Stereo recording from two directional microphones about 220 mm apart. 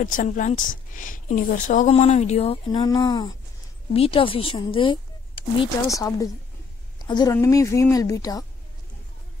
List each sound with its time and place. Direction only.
0.0 s a woman's voice: 35° left (ahead or behind); by 8.5 s 15° left (ahead or behind)